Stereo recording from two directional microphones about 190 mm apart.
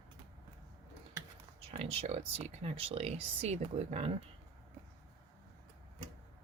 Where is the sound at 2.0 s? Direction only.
35° right (ahead or behind).